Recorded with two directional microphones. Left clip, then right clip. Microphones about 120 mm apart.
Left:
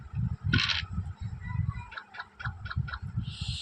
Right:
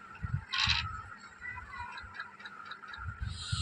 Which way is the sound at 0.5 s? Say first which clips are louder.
Left 2 dB; 45° left (ahead or behind).